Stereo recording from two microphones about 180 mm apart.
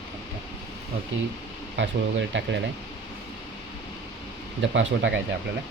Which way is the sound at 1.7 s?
90° right.